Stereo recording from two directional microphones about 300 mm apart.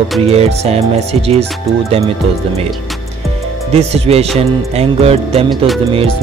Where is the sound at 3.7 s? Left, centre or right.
Centre.